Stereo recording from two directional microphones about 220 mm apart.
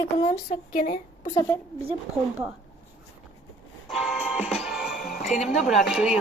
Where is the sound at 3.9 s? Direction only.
Centre (ahead or behind).